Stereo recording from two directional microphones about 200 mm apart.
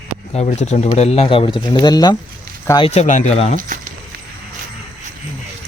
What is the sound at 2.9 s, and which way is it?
Speech, 35° left (ahead or behind).